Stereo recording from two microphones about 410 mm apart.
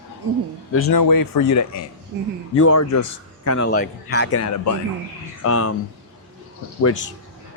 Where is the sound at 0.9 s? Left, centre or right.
Left.